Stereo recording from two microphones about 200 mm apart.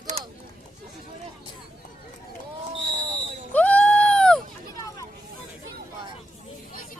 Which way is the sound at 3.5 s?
5° left (ahead or behind).